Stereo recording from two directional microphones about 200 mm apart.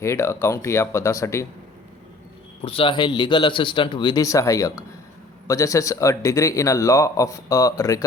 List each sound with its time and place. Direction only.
0.0 s speech: 15° left (ahead or behind)
2.6 s speech: 25° left (ahead or behind)